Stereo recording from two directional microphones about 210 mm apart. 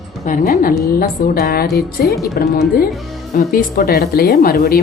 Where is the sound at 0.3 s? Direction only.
40° left (ahead or behind).